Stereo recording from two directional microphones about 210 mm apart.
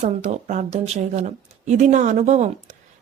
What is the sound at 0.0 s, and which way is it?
Speech, 35° right (ahead or behind).